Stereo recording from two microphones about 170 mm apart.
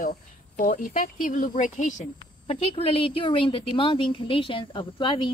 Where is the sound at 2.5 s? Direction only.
35° left (ahead or behind).